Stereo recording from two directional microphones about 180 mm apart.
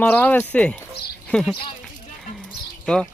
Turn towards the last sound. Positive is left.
turn(degrees=5)  # may be behind; listen again after turning